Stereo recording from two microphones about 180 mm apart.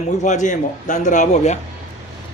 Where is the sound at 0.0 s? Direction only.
40° left (ahead or behind).